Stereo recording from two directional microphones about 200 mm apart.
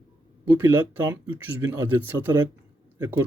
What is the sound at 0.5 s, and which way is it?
Speech, 10° right (ahead or behind).